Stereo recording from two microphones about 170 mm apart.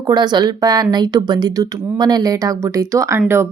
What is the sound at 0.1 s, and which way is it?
Speech, 25° right (ahead or behind).